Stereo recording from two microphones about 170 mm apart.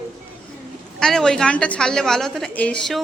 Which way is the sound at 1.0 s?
5° left (ahead or behind).